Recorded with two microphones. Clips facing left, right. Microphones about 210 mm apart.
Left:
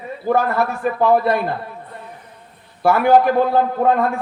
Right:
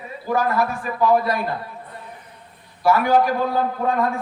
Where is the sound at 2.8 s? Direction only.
55° left (ahead or behind).